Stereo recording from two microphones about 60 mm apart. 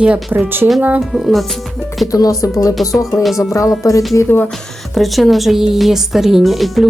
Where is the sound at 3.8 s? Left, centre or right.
Left.